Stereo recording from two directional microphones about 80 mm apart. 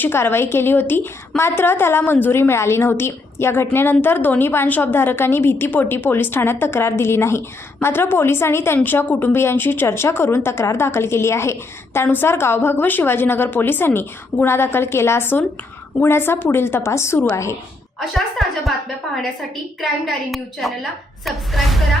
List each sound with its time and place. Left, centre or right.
0.0 s a woman's voice: left
18.0 s a woman's voice: centre
19.8 s a woman's voice: centre